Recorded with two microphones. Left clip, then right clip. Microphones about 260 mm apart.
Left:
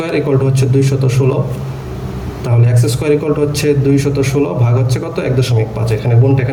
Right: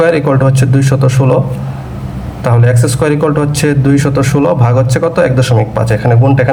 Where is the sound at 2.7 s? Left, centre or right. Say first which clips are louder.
Right 2 dB; centre.